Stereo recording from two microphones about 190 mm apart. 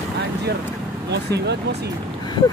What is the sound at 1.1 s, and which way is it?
Speech, 60° right (ahead or behind).